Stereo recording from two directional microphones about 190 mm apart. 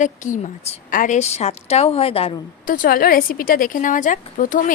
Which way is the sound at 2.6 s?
45° left (ahead or behind).